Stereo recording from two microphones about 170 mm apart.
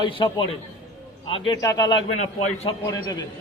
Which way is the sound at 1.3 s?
25° left (ahead or behind).